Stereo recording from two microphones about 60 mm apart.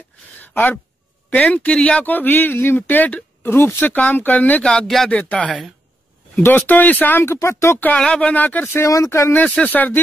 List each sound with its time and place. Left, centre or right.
0.4 s a sound: left
1.3 s speech: left
4.8 s speech: centre
5.1 s speech: left
7.3 s speech: left
8.0 s speech: centre
8.8 s speech: left
9.1 s speech: left
9.4 s speech: left